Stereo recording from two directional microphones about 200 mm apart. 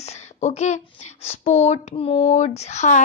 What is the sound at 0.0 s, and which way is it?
Speech, 30° left (ahead or behind).